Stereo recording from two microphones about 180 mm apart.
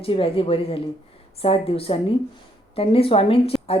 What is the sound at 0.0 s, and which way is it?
A woman's voice, 30° left (ahead or behind).